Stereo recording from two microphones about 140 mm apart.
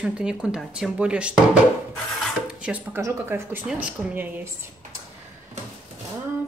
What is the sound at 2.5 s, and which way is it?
Speech, 10° right (ahead or behind).